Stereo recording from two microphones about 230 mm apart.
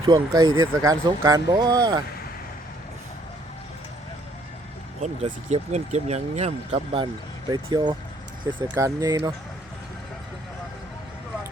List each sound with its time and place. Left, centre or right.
0.0 s speech: centre
5.0 s speech: right